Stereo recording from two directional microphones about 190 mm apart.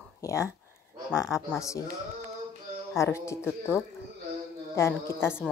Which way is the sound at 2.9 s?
15° left (ahead or behind).